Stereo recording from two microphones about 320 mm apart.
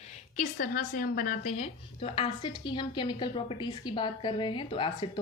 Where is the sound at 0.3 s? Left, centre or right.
Left.